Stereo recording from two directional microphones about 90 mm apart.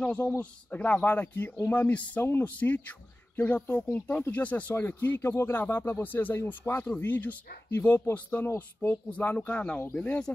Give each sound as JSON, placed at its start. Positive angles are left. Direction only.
{"t": 0.0, "sound": "speech", "side_deg": 15}